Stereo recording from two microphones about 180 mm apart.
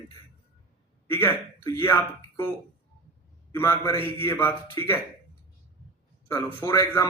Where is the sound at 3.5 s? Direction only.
15° left (ahead or behind).